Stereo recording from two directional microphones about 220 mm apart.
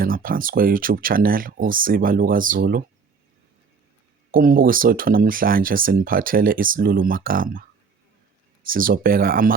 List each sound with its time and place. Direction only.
0.0 s speech: 40° right (ahead or behind)
4.3 s speech: 40° right (ahead or behind)
8.6 s speech: 40° right (ahead or behind)